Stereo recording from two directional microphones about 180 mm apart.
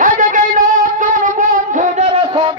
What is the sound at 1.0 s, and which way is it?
Shofar, 45° right (ahead or behind).